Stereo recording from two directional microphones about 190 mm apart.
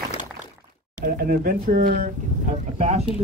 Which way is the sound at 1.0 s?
50° right (ahead or behind).